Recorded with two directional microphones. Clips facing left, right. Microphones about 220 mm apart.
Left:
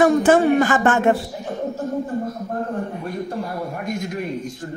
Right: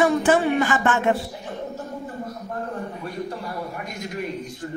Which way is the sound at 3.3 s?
50° left (ahead or behind).